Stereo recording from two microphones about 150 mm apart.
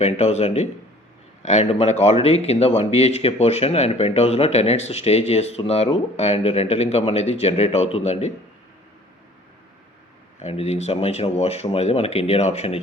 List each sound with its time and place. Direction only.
0.0 s speech: 45° left (ahead or behind)
10.4 s speech: 45° left (ahead or behind)